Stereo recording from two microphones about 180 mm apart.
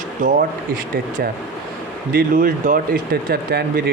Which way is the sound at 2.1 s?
50° right (ahead or behind).